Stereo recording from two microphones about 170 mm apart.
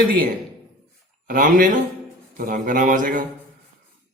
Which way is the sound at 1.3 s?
55° right (ahead or behind).